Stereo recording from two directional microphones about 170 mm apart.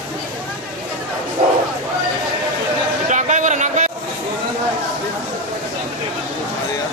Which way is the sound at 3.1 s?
45° right (ahead or behind).